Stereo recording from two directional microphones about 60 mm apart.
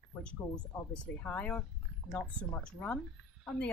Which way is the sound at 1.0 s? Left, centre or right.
Left.